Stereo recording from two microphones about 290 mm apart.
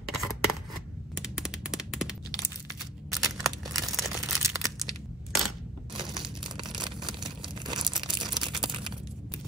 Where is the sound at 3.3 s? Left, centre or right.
Centre.